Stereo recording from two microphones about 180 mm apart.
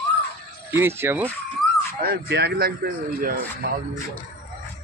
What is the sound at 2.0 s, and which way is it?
Speech, 65° right (ahead or behind).